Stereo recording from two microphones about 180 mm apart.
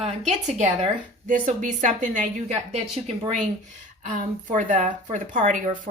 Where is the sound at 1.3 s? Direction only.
45° right (ahead or behind).